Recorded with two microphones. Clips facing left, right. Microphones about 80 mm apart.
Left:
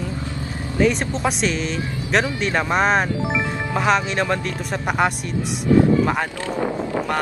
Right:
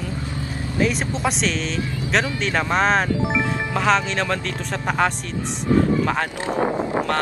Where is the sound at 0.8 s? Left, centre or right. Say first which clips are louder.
Left 3 dB; centre.